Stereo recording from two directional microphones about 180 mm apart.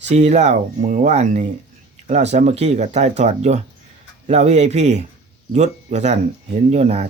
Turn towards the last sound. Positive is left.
turn(degrees=-35)  # may be behind; listen again after turning